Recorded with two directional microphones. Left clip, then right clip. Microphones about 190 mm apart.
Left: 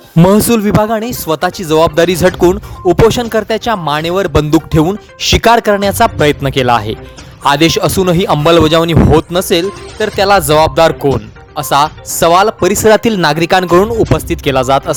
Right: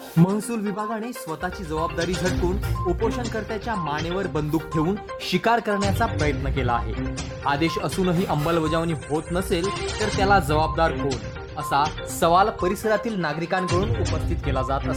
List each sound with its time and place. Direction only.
0.3 s speech: 50° left (ahead or behind)